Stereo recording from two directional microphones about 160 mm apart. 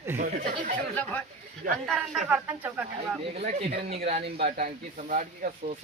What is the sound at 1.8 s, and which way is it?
Speech, centre (ahead or behind).